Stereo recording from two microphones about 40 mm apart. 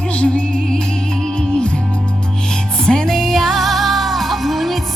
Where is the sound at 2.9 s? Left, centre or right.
Centre.